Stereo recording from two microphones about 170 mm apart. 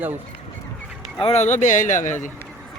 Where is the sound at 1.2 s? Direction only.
35° left (ahead or behind).